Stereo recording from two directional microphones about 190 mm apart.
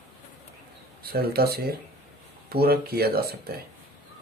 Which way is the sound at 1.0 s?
55° right (ahead or behind).